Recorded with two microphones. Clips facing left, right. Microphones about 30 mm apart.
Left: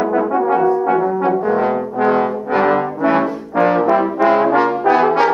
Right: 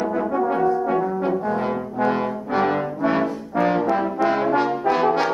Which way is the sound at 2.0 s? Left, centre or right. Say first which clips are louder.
Left 7 dB; centre.